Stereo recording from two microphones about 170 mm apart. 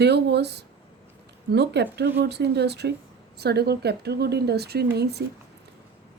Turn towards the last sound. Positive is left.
turn(degrees=-75)  # may be behind; listen again after turning